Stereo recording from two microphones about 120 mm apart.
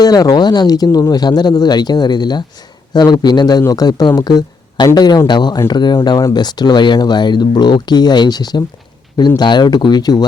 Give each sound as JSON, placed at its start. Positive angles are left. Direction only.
{"t": 0.0, "sound": "speech", "side_deg": 30}